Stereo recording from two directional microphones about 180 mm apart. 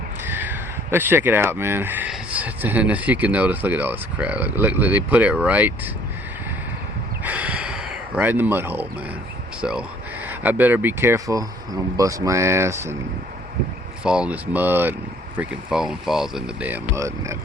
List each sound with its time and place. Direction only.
0.3 s speech: 10° right (ahead or behind)
7.3 s a sound: 10° right (ahead or behind)
9.6 s speech: 5° right (ahead or behind)
14.0 s speech: 5° right (ahead or behind)